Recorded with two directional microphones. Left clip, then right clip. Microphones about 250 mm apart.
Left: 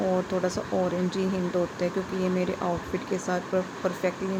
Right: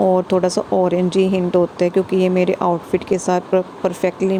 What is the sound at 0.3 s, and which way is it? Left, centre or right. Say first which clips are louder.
Speech: right 11 dB; right.